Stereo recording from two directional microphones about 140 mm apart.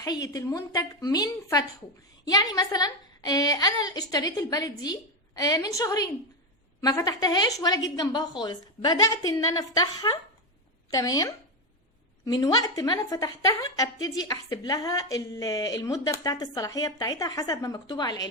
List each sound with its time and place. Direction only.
0.0 s a woman's voice: 25° left (ahead or behind)